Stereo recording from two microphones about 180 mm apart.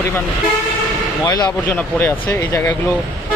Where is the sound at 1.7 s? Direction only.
10° left (ahead or behind).